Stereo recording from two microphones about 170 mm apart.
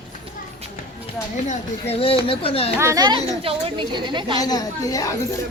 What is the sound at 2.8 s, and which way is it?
Speech, 20° right (ahead or behind).